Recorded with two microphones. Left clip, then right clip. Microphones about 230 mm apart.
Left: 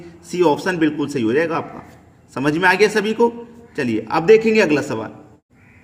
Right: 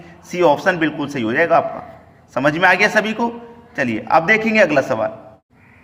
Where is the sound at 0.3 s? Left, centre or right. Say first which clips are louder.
Right 3 dB; centre.